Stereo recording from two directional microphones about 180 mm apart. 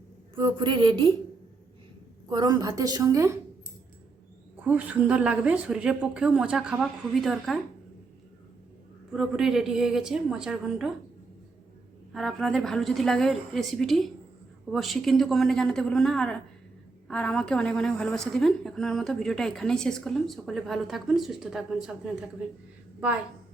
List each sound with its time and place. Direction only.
0.3 s a woman's voice: 25° right (ahead or behind)
2.3 s a woman's voice: 20° right (ahead or behind)
4.6 s a woman's voice: 10° right (ahead or behind)
9.1 s a woman's voice: centre (ahead or behind)
12.1 s a woman's voice: centre (ahead or behind)